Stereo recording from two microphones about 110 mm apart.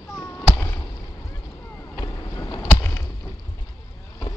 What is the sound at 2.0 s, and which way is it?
Boat, 35° left (ahead or behind).